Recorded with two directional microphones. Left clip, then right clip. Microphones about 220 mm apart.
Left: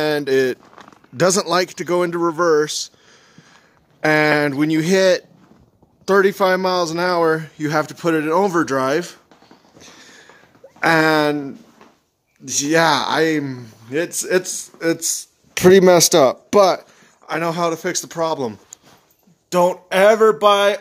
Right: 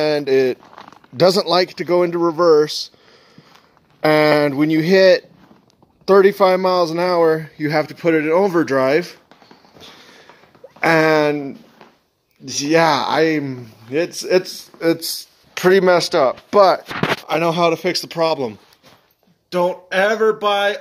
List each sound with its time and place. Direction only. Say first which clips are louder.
0.0 s speech: right 2 dB; 5° left (ahead or behind)
0.7 s a sound: right 3 dB; 40° right (ahead or behind)
1.1 s a man's voice: right 2 dB; 5° left (ahead or behind)
9.8 s a sound: right 1 dB; 5° right (ahead or behind)
10.8 s a man's voice: right 1 dB; centre (ahead or behind)
15.6 s speech: left 2 dB; 45° left (ahead or behind)
16.1 s speech: left 2 dB; 65° left (ahead or behind)
17.3 s a man's voice: right 2 dB; 5° right (ahead or behind)
19.5 s speech: left 2 dB; 35° left (ahead or behind)